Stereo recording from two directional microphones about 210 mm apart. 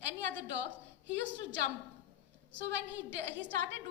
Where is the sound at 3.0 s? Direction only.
55° right (ahead or behind).